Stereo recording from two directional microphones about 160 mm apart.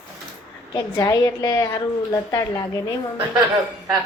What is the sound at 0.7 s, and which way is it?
Speech, 25° left (ahead or behind).